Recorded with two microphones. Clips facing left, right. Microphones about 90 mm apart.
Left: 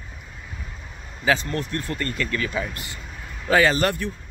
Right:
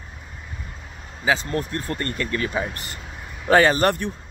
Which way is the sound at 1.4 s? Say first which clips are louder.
Right 1 dB; 30° right (ahead or behind).